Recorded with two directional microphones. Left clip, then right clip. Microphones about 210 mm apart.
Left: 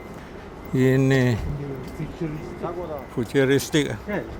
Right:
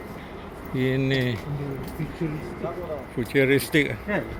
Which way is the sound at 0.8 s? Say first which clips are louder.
Left 5 dB; 35° left (ahead or behind).